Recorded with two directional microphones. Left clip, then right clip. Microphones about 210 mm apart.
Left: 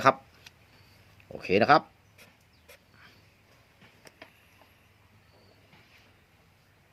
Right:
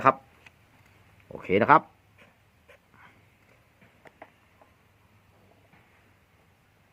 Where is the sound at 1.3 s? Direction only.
15° right (ahead or behind).